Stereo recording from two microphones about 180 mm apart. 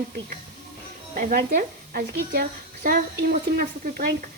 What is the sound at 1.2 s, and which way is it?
Speech, 45° right (ahead or behind).